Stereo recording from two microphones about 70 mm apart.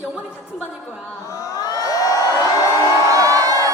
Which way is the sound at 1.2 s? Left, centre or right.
Left.